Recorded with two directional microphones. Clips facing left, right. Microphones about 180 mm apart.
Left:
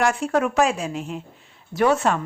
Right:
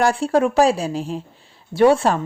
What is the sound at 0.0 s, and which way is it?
Speech, 30° right (ahead or behind).